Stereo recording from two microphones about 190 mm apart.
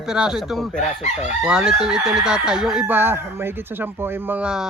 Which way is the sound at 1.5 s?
5° right (ahead or behind).